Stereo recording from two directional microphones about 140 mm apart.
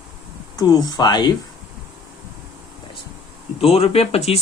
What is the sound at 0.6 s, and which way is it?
Speech, 25° left (ahead or behind).